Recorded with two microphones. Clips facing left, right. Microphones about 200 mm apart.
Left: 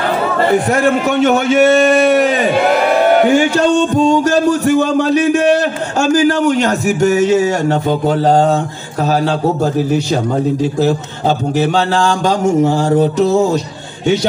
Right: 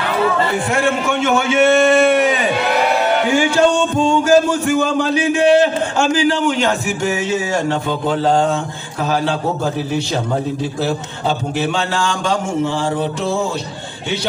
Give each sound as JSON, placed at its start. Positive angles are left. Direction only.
{"t": 0.5, "sound": "a man's voice", "side_deg": 40}
{"t": 10.8, "sound": "a man's voice", "side_deg": 40}